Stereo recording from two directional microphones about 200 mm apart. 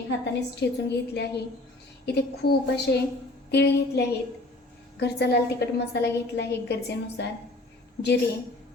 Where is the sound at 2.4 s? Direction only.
55° left (ahead or behind).